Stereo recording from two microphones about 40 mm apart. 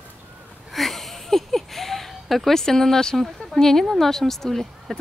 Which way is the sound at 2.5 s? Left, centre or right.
Centre.